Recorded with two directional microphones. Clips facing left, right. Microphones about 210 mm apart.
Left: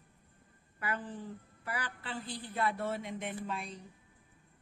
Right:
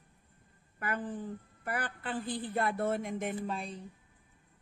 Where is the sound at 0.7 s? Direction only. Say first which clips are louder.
Right 3 dB; 50° right (ahead or behind).